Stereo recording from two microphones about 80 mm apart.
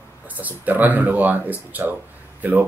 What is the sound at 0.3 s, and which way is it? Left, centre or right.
Speech, right.